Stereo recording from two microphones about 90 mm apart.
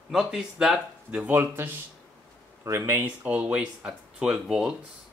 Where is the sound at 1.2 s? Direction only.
20° right (ahead or behind).